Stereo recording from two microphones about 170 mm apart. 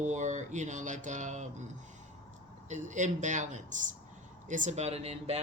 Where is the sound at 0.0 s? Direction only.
45° right (ahead or behind).